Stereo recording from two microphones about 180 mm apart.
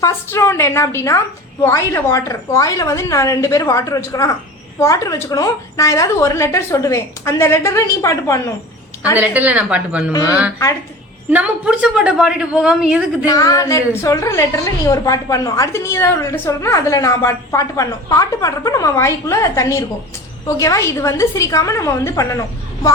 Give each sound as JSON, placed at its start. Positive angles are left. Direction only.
{"t": 0.0, "sound": "a woman's voice", "side_deg": 15}
{"t": 9.1, "sound": "a woman's voice", "side_deg": -10}
{"t": 10.1, "sound": "a woman's voice", "side_deg": 20}
{"t": 11.3, "sound": "a woman's voice", "side_deg": -10}
{"t": 13.2, "sound": "a woman's voice", "side_deg": 20}